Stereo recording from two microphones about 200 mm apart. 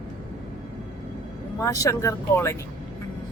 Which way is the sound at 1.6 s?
15° left (ahead or behind).